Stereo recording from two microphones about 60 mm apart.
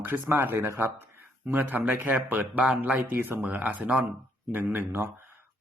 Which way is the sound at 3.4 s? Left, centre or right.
Right.